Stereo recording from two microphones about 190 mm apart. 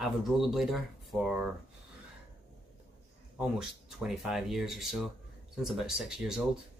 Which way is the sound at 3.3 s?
5° right (ahead or behind).